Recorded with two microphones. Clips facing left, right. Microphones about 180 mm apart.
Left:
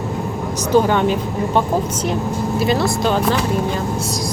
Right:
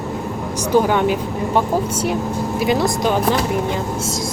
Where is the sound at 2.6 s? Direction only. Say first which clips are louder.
Even; 15° right (ahead or behind).